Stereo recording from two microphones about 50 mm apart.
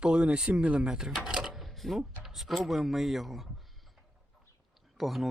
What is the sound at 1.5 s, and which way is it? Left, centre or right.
Speech, centre.